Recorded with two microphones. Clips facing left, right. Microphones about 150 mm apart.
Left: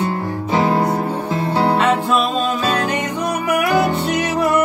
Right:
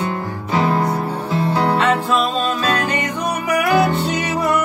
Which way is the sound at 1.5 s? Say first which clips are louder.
Left 2 dB; 30° left (ahead or behind).